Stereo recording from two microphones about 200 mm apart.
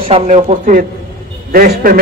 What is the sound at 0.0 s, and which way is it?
Speech, 30° right (ahead or behind).